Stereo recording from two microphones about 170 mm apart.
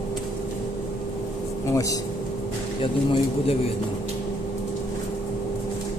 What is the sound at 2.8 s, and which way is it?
Speech, 35° left (ahead or behind).